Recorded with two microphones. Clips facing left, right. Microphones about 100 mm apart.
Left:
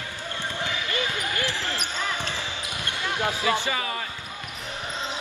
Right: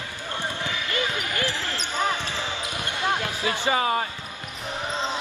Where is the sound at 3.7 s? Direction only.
35° right (ahead or behind).